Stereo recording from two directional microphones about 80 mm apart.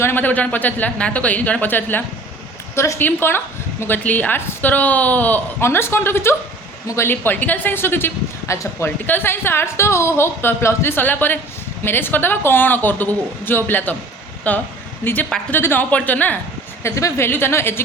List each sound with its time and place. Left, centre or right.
0.0 s a woman's voice: left
2.7 s a woman's voice: left
3.0 s a woman's voice: left
7.1 s a woman's voice: left
16.8 s a woman's voice: left